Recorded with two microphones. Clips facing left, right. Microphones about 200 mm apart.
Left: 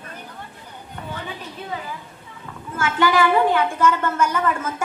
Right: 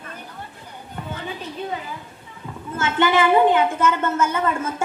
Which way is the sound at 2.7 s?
25° right (ahead or behind).